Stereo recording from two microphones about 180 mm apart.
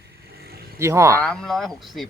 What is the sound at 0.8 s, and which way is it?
Speech, 15° right (ahead or behind).